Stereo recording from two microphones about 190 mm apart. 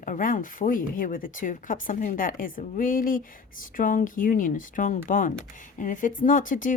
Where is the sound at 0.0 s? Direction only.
45° left (ahead or behind).